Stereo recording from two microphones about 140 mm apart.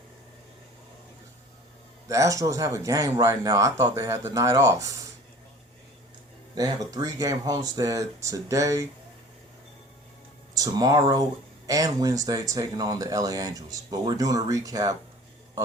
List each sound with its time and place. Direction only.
2.0 s speech: 25° right (ahead or behind)
6.6 s speech: 25° right (ahead or behind)
10.5 s speech: 25° right (ahead or behind)